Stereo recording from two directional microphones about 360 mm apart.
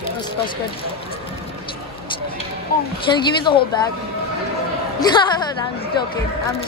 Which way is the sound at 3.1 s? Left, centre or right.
Centre.